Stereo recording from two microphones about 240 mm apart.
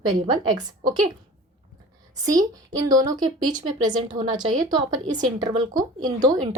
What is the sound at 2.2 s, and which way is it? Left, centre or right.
A woman's voice, centre.